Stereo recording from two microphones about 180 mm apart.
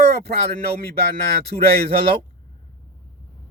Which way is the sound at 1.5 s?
60° right (ahead or behind).